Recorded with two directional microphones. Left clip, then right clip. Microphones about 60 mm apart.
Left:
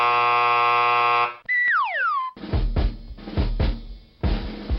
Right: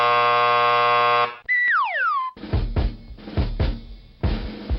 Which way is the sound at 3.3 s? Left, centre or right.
Centre.